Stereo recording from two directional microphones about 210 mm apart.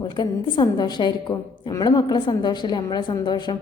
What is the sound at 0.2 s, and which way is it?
A woman's voice, 20° left (ahead or behind).